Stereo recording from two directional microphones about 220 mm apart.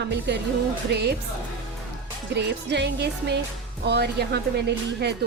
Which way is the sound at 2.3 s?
50° right (ahead or behind).